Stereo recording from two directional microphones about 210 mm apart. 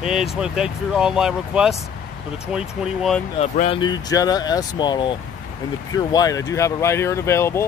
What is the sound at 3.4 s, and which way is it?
Speech, 30° left (ahead or behind).